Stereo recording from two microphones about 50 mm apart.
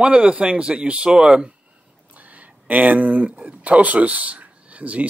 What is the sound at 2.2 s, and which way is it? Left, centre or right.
Speech, right.